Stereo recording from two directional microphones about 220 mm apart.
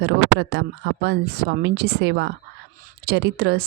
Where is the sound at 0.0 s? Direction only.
50° right (ahead or behind).